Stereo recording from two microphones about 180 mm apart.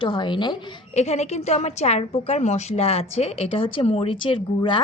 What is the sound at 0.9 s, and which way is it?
A woman's voice, 35° left (ahead or behind).